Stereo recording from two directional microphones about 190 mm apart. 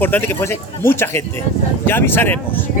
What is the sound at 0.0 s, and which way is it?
A man's voice, 10° left (ahead or behind).